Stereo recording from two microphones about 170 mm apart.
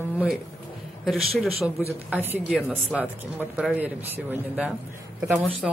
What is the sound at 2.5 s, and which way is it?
Speech, centre (ahead or behind).